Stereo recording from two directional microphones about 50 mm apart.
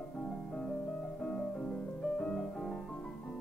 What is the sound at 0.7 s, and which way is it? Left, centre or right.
Music, left.